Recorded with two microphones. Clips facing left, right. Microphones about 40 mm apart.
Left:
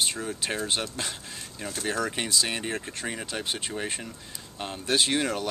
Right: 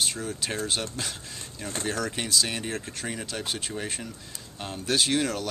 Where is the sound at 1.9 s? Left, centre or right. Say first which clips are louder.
Left 1 dB; centre.